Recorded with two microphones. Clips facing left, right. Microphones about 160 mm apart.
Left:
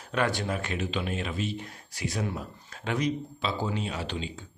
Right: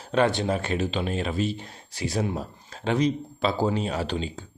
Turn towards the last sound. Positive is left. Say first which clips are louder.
# right 6 dB
turn(degrees=-40)  # may be behind; listen again after turning